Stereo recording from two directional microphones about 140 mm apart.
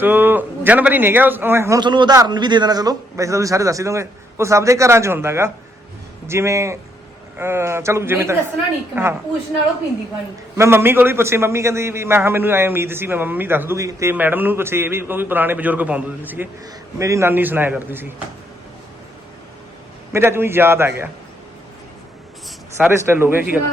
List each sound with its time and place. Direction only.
0.0 s a man's voice: 15° right (ahead or behind)
1.8 s a man's voice: 30° right (ahead or behind); by 8.4 s 15° right (ahead or behind)
10.6 s a man's voice: 15° right (ahead or behind)
20.1 s a man's voice: 15° right (ahead or behind)
23.0 s a man's voice: 15° right (ahead or behind)